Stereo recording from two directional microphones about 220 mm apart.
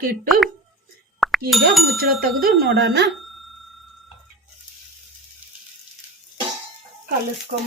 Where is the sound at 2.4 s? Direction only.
45° right (ahead or behind).